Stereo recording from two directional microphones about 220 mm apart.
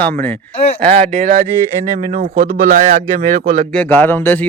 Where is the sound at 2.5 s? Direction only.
35° right (ahead or behind).